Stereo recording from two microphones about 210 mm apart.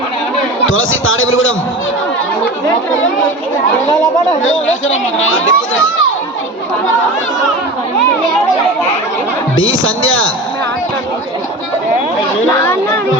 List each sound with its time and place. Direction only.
0.6 s speech: 70° left (ahead or behind)
4.4 s speech: 70° left (ahead or behind)
9.6 s speech: 70° left (ahead or behind)
12.5 s speech: 10° left (ahead or behind)